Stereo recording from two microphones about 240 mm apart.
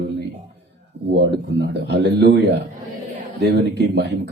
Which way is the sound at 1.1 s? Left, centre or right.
Right.